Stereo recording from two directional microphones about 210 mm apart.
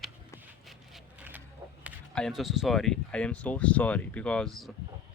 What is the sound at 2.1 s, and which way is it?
Speech, centre (ahead or behind).